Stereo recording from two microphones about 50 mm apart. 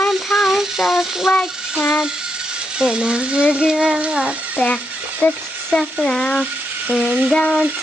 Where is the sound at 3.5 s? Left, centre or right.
Centre.